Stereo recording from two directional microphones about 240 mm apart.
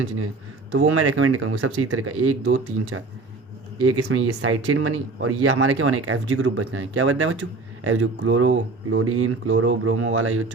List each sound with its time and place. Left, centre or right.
0.8 s speech: right